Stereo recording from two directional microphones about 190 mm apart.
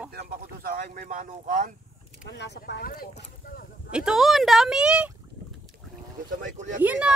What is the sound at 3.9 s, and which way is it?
Speech, 5° right (ahead or behind).